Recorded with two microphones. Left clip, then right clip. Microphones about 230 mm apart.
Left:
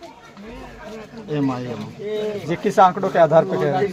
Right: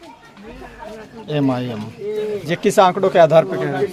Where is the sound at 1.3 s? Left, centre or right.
Right.